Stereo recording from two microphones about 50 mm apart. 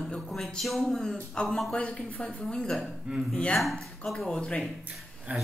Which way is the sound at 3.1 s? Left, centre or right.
Right.